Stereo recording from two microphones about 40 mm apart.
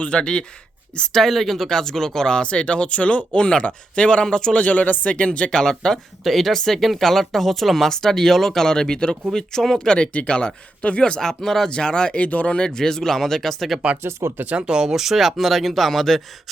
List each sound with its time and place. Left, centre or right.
0.0 s speech: left
1.2 s speech: centre; by 4.6 s left
4.6 s speech: left
5.5 s speech: centre
6.2 s speech: centre
10.1 s speech: left; by 11.7 s centre
11.7 s speech: left
12.5 s speech: centre
14.0 s speech: right
14.7 s speech: centre
15.0 s speech: centre